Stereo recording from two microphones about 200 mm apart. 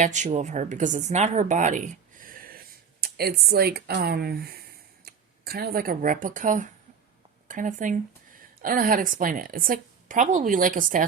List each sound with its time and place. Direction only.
0.0 s a woman's voice: 35° right (ahead or behind)